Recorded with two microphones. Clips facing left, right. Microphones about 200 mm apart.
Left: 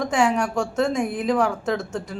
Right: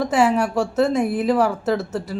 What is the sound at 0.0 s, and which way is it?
A woman's voice, 5° right (ahead or behind).